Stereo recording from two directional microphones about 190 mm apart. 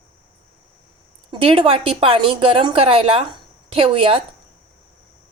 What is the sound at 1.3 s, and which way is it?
A woman's voice, 30° right (ahead or behind).